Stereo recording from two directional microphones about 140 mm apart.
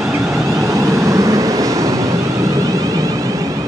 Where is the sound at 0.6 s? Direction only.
20° right (ahead or behind).